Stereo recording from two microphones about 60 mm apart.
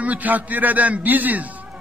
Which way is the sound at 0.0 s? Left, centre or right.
Right.